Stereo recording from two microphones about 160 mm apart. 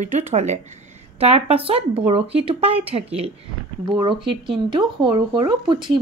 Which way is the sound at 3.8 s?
30° right (ahead or behind).